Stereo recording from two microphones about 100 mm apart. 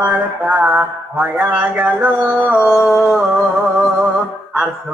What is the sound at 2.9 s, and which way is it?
Music, centre (ahead or behind).